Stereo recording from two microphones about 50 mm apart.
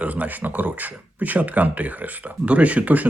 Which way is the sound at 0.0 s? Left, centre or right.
Right.